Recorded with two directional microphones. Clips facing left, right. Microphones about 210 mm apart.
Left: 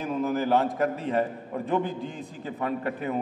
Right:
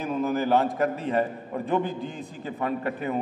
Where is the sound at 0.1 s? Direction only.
20° right (ahead or behind).